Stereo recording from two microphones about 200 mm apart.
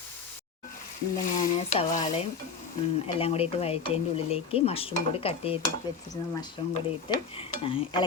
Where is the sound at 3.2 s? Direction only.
30° left (ahead or behind).